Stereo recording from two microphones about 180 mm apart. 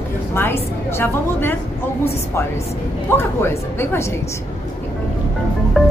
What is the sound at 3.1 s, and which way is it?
Speech, 10° left (ahead or behind).